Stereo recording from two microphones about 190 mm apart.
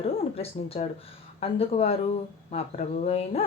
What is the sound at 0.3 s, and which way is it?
Speech, 30° left (ahead or behind).